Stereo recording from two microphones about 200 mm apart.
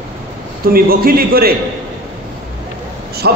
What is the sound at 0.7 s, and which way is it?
Speech, 50° right (ahead or behind).